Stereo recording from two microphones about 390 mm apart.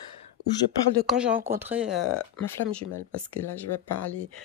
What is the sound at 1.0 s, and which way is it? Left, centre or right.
Speech, centre.